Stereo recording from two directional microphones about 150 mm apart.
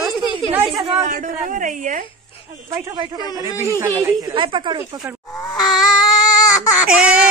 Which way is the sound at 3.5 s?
20° left (ahead or behind).